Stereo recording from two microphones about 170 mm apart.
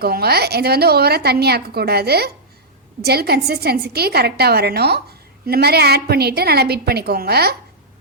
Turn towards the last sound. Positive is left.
turn(degrees=-70)  # may be behind; listen again after turning